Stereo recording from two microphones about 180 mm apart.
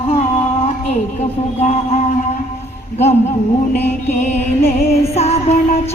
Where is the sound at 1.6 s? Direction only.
35° left (ahead or behind).